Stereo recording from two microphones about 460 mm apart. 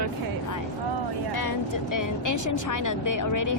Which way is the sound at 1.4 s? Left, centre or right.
Left.